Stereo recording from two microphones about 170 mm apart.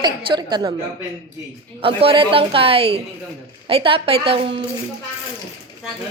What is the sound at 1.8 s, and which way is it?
A woman's voice, 30° right (ahead or behind).